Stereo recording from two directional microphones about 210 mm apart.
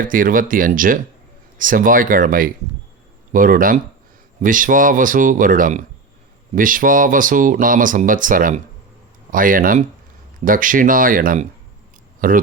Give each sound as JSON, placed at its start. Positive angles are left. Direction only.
{"t": 0.0, "sound": "speech", "side_deg": -40}